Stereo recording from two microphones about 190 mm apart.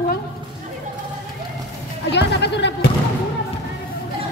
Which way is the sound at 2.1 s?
65° left (ahead or behind).